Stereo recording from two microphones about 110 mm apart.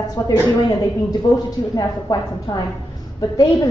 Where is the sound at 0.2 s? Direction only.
35° left (ahead or behind).